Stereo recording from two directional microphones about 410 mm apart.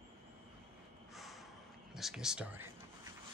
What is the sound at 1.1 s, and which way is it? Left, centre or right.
Snort, centre.